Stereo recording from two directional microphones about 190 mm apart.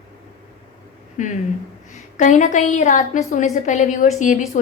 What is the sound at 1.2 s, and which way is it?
A woman's voice, 40° left (ahead or behind).